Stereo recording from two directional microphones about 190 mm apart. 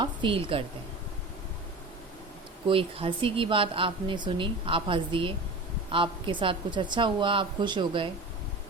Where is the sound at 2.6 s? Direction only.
30° right (ahead or behind).